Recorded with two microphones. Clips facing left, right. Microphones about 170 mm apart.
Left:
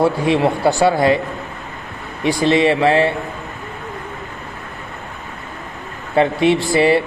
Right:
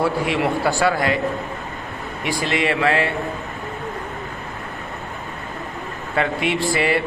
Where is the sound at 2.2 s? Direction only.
30° left (ahead or behind).